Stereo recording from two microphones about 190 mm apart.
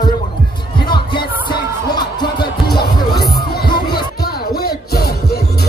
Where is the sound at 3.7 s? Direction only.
25° left (ahead or behind).